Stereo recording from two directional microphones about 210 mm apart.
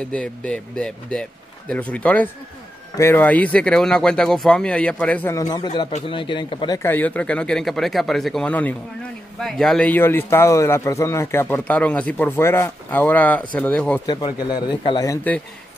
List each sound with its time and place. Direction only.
0.1 s a man's voice: 5° left (ahead or behind); by 6.8 s 25° left (ahead or behind)
6.8 s speech: 10° left (ahead or behind)
14.0 s a man's voice: 20° left (ahead or behind)